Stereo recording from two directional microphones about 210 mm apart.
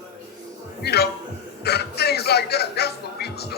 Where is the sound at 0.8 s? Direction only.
50° left (ahead or behind).